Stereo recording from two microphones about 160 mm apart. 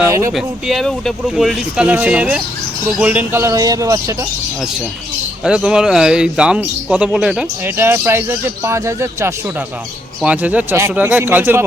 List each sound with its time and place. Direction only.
0.0 s speech: 20° right (ahead or behind)
0.3 s speech: centre (ahead or behind); by 4.3 s 20° right (ahead or behind)
5.4 s speech: 5° right (ahead or behind)